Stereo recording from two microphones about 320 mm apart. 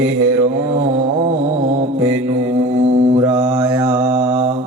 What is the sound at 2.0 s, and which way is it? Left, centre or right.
Mantra, centre.